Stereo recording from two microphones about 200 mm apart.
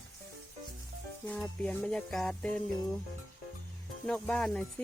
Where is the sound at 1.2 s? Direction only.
5° left (ahead or behind).